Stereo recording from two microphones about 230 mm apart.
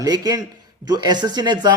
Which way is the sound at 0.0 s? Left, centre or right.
Centre.